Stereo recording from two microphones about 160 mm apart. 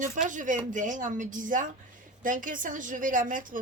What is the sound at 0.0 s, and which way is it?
A woman's voice, 55° right (ahead or behind).